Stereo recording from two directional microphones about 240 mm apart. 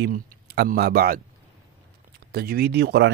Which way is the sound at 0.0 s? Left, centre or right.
Right.